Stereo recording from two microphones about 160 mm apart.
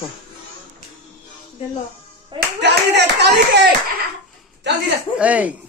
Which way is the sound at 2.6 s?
90° right.